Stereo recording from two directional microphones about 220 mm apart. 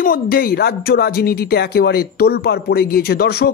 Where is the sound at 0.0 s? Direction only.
40° left (ahead or behind).